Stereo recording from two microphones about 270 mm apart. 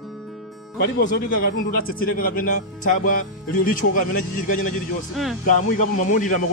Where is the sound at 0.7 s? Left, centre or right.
Left.